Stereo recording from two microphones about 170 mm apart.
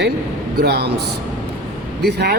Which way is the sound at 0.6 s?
75° right (ahead or behind).